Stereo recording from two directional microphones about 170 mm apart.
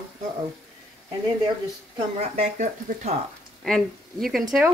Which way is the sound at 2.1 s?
45° right (ahead or behind).